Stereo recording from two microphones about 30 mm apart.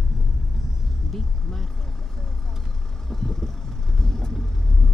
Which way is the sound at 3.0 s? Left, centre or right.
Centre.